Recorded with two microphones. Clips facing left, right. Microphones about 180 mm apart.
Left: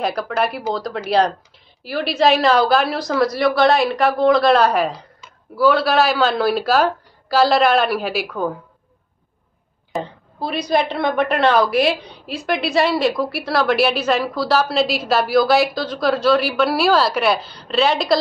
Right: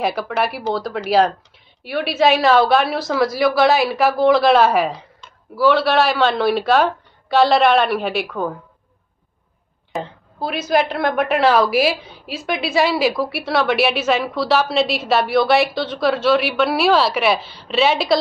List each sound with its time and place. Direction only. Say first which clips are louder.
0.0 s a woman's voice: even; centre (ahead or behind)
9.9 s a woman's voice: left 1 dB; centre (ahead or behind)